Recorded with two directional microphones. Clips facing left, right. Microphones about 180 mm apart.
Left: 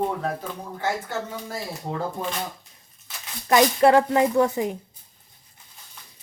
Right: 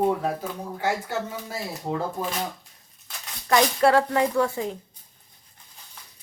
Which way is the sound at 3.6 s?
20° left (ahead or behind).